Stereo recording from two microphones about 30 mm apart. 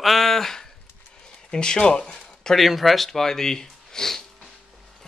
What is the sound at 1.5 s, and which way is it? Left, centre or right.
Speech, left.